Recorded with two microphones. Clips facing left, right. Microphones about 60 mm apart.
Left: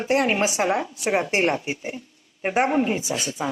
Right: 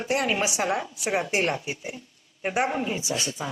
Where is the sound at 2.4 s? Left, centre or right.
Left.